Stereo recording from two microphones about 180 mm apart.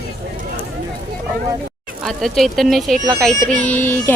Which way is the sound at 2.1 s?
Centre (ahead or behind).